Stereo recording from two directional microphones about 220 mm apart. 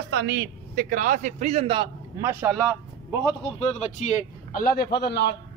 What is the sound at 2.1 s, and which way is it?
Speech, 10° right (ahead or behind).